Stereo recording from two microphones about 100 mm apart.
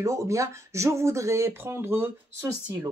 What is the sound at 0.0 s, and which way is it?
Speech, 30° right (ahead or behind).